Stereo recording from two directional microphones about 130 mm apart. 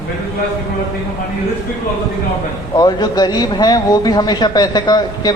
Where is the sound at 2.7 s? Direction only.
30° left (ahead or behind).